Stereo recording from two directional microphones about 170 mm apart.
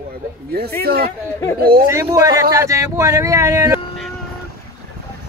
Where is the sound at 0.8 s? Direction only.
65° right (ahead or behind).